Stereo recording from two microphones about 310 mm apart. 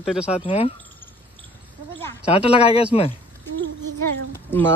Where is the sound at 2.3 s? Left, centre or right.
Centre.